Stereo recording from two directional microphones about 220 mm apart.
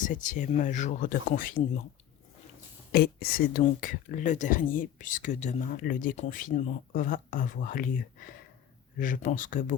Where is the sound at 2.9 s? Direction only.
45° left (ahead or behind).